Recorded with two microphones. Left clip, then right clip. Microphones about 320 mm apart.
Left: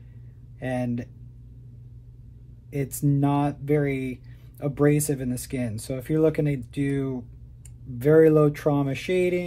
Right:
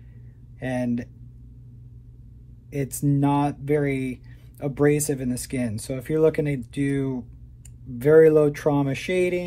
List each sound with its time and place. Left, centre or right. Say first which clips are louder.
0.6 s speech: right 2 dB; centre
2.7 s speech: right 1 dB; centre